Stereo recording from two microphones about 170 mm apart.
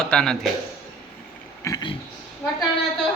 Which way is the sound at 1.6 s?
20° left (ahead or behind).